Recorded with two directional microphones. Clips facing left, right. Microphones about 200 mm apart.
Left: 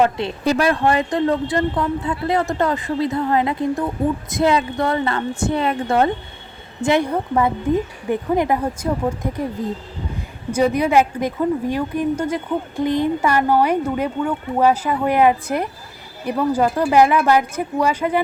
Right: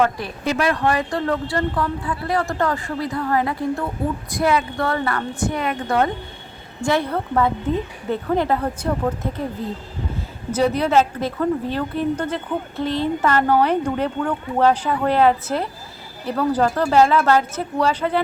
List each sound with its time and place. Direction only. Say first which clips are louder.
0.0 s speech: left 2 dB; 25° left (ahead or behind)
0.4 s speech: left 2 dB; 35° left (ahead or behind)
6.8 s a woman's voice: left 3 dB; 15° left (ahead or behind)
10.5 s a woman's voice: left 1 dB; 10° left (ahead or behind)